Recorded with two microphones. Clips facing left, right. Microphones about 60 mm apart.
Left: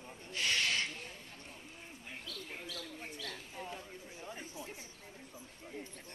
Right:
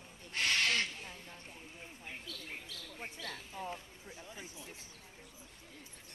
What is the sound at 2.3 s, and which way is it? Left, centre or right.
Mouse, left.